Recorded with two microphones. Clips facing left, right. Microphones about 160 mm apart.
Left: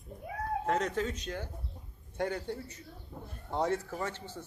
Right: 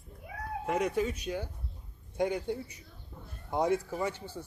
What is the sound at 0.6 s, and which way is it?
Speech, 10° right (ahead or behind).